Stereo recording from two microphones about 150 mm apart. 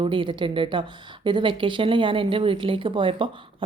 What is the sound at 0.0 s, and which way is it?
A woman's voice, 35° right (ahead or behind).